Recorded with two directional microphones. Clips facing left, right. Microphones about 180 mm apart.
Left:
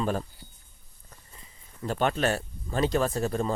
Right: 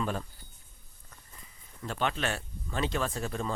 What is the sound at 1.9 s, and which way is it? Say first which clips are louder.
Speech: left 6 dB; 45° left (ahead or behind).